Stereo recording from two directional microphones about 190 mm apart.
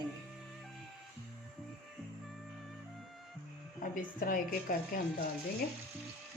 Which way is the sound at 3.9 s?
45° left (ahead or behind).